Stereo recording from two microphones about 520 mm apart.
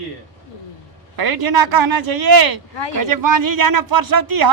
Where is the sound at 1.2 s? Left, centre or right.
Right.